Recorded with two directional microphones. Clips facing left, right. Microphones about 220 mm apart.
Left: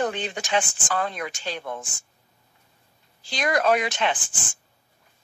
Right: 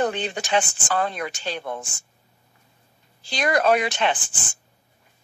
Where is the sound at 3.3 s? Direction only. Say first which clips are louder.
Right 2 dB; 30° right (ahead or behind).